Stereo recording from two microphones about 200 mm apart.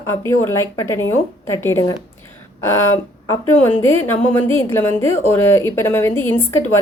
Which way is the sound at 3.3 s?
10° left (ahead or behind).